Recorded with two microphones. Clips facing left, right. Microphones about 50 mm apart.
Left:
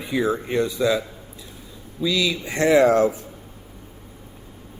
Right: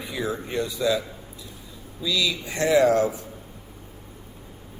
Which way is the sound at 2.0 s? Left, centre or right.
Left.